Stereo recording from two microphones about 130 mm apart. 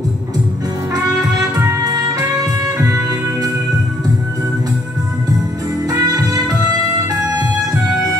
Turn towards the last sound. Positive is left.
turn(degrees=-25)  # may be behind; listen again after turning